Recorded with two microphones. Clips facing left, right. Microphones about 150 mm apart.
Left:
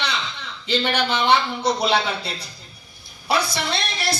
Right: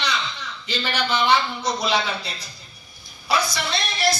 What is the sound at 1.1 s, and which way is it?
A man's voice, 60° left (ahead or behind).